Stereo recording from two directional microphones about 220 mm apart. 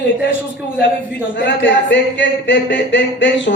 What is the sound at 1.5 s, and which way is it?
Speech, 55° left (ahead or behind).